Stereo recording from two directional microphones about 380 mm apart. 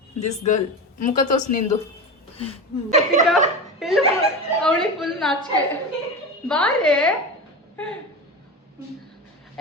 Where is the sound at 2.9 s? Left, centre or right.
Centre.